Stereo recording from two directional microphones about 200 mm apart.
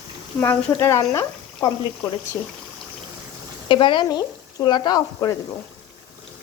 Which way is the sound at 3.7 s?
25° left (ahead or behind).